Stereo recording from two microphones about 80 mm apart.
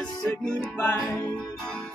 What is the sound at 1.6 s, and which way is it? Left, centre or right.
Music, centre.